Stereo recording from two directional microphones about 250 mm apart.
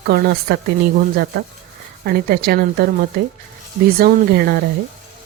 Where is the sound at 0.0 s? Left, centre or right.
Right.